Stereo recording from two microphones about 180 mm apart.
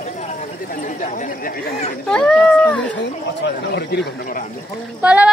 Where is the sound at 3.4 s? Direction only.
70° left (ahead or behind).